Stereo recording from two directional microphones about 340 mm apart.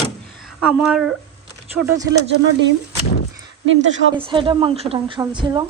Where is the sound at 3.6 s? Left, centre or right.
Right.